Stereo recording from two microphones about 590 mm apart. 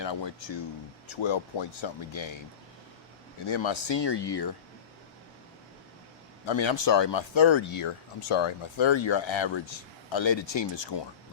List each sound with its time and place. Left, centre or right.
0.0 s speech: left
3.4 s speech: left
6.4 s speech: left